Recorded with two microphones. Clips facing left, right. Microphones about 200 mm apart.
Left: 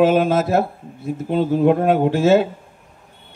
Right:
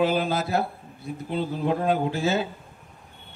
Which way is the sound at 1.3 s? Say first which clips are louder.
Left 10 dB; 65° left (ahead or behind).